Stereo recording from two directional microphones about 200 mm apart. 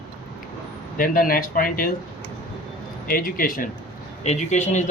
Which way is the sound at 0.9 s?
45° left (ahead or behind).